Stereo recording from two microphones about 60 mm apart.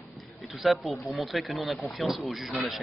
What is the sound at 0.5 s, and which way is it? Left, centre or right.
A man's voice, centre.